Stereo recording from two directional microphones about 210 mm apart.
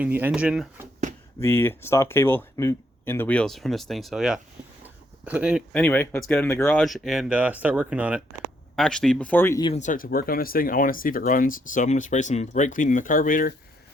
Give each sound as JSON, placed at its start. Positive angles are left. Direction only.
{"t": 0.0, "sound": "speech", "side_deg": -10}
{"t": 1.4, "sound": "speech", "side_deg": 10}
{"t": 4.8, "sound": "a sound", "side_deg": -5}
{"t": 5.7, "sound": "speech", "side_deg": 10}
{"t": 6.7, "sound": "speech", "side_deg": 0}
{"t": 9.6, "sound": "speech", "side_deg": 35}